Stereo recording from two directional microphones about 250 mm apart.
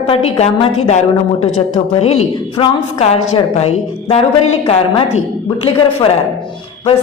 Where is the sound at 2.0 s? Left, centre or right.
Left.